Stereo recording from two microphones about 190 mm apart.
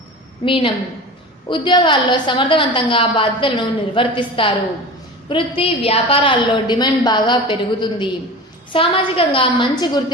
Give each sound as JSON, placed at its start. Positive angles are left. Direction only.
{"t": 0.4, "sound": "a woman's voice", "side_deg": 25}